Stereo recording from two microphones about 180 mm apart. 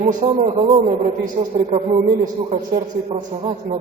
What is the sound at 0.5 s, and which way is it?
Speech, 30° right (ahead or behind).